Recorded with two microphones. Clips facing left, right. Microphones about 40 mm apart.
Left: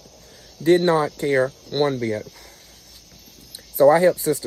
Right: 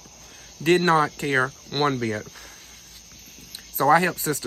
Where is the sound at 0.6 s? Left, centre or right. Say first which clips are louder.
Left 2 dB; right.